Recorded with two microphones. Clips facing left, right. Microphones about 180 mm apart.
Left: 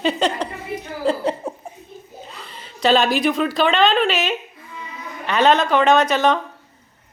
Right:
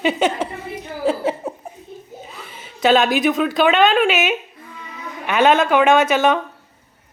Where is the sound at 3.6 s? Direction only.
5° right (ahead or behind).